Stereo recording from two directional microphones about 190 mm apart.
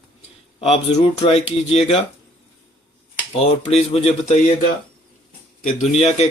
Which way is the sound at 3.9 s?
35° left (ahead or behind).